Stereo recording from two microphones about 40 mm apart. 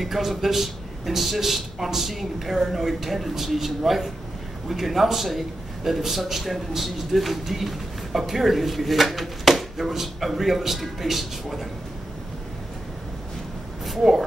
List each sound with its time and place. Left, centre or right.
0.0 s speech: centre
13.8 s speech: centre